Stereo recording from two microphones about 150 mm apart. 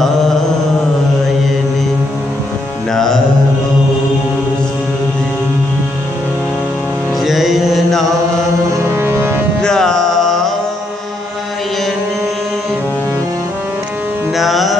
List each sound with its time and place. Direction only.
2.9 s music: 5° left (ahead or behind)
7.2 s mantra: centre (ahead or behind)
8.9 s a sound: 15° right (ahead or behind)
9.6 s music: 5° left (ahead or behind)
14.3 s carnatic music: centre (ahead or behind)